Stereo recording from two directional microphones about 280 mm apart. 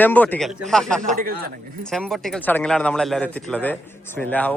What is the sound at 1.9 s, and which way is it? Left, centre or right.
Speech, centre.